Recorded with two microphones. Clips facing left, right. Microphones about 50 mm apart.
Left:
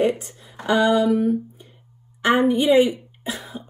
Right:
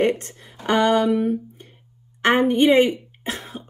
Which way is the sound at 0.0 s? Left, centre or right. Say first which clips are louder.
Even; right.